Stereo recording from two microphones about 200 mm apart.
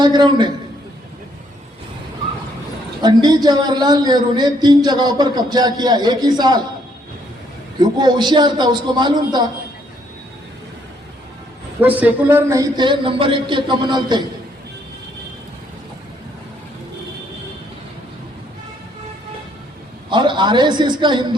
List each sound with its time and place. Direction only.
0.0 s a man's voice: 20° right (ahead or behind)
3.0 s a man's voice: 20° right (ahead or behind)
7.8 s a man's voice: 20° right (ahead or behind)
11.8 s a man's voice: 10° right (ahead or behind)
20.1 s a man's voice: 25° right (ahead or behind)